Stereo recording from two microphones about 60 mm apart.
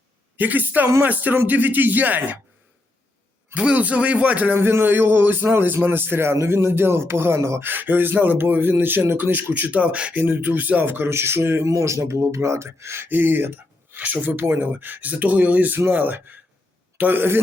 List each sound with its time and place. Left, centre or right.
0.3 s speech: right
3.5 s speech: right
4.5 s a man's voice: right
6.3 s speech: right
7.6 s a man's voice: right
11.1 s speech: right
11.7 s speech: right
13.1 s speech: right
14.4 s speech: right
14.7 s a man's voice: right